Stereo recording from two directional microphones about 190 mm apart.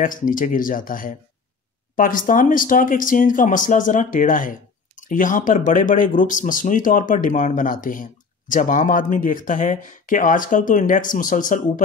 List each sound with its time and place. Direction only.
0.0 s speech: 45° left (ahead or behind)